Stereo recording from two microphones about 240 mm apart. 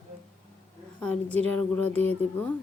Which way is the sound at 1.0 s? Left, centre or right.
Centre.